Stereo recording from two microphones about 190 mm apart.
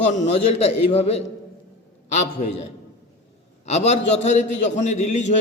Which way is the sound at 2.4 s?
45° left (ahead or behind).